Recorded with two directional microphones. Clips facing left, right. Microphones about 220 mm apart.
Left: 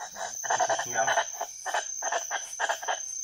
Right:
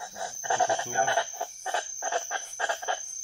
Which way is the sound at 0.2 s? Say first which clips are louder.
Right 2 dB; 30° right (ahead or behind).